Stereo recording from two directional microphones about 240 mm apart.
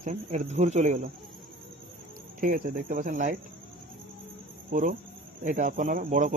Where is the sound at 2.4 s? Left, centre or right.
Right.